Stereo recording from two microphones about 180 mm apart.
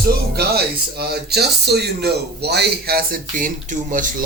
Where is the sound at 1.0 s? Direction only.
60° right (ahead or behind); by 4.2 s 45° right (ahead or behind).